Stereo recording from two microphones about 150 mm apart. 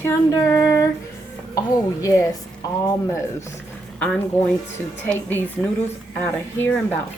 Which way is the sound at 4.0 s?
10° left (ahead or behind).